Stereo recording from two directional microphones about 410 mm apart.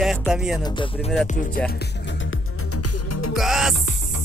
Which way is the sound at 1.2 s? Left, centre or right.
Centre.